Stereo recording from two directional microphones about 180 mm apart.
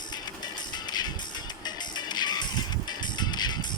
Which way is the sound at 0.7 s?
25° left (ahead or behind).